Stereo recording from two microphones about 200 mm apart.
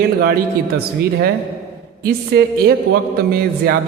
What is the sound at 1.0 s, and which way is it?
A man's voice, 50° right (ahead or behind).